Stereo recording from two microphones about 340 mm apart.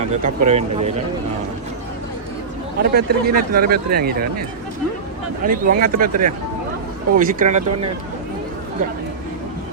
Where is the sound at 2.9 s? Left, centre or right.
Right.